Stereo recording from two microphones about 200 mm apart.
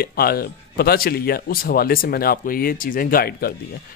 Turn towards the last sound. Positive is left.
turn(degrees=50)  # may be behind; listen again after turning